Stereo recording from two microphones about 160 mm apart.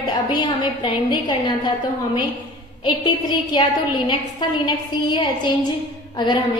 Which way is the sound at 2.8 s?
30° left (ahead or behind).